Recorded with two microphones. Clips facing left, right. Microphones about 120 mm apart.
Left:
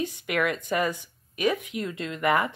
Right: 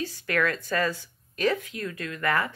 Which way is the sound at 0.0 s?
15° left (ahead or behind).